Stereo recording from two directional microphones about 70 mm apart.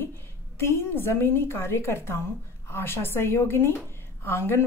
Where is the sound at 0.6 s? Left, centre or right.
Left.